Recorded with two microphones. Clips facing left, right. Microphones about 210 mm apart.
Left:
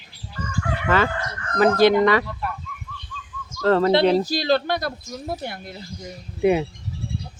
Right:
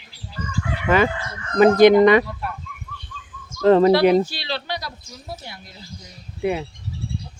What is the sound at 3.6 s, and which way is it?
Speech, 15° right (ahead or behind).